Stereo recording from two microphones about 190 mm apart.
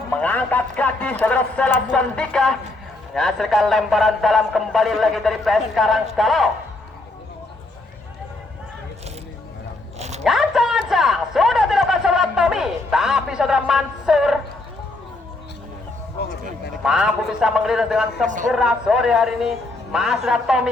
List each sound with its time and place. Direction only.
0.2 s a man's voice: 10° left (ahead or behind)
10.0 s zipper: 35° right (ahead or behind)
10.2 s a sound: centre (ahead or behind)
16.8 s a man's voice: 5° right (ahead or behind)